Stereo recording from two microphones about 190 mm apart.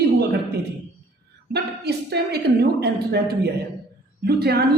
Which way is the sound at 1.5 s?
60° right (ahead or behind).